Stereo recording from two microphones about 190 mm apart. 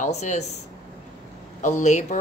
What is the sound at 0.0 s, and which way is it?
Speech, 40° left (ahead or behind).